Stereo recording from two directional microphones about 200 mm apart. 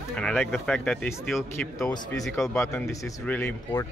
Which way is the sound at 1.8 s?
15° left (ahead or behind).